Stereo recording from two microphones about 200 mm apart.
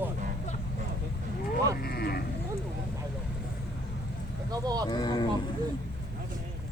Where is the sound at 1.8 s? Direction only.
50° left (ahead or behind).